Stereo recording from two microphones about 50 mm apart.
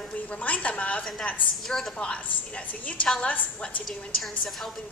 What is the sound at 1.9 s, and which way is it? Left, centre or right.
Speech, left.